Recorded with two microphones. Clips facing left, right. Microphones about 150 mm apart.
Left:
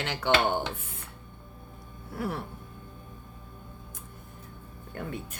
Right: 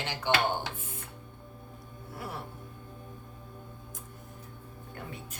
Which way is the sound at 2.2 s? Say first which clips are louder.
Left 7 dB; 60° left (ahead or behind).